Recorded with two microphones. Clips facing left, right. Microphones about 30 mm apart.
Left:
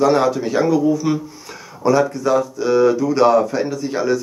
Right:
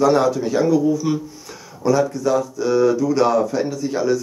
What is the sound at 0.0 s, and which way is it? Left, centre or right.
Speech, left.